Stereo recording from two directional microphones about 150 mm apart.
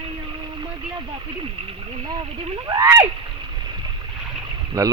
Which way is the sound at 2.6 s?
25° right (ahead or behind).